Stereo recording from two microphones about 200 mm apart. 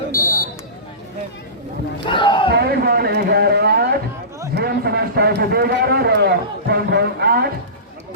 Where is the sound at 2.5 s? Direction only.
50° right (ahead or behind).